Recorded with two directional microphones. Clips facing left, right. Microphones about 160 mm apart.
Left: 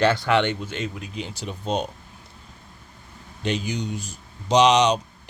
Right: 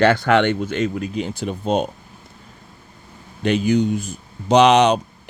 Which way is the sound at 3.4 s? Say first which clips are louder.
Right 9 dB; 55° right (ahead or behind).